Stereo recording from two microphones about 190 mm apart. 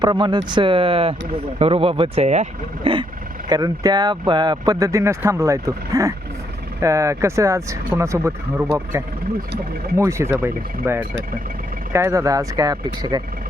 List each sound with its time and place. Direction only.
0.0 s speech: 25° right (ahead or behind)